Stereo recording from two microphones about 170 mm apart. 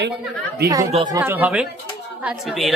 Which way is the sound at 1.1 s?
15° right (ahead or behind).